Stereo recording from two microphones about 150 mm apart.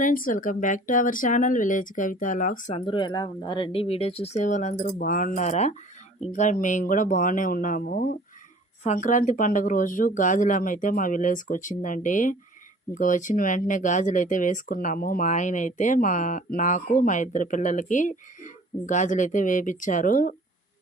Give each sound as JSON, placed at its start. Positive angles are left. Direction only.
{"t": 0.0, "sound": "speech", "side_deg": 65}
{"t": 2.7, "sound": "speech", "side_deg": 35}
{"t": 4.9, "sound": "speech", "side_deg": 65}
{"t": 8.8, "sound": "speech", "side_deg": 55}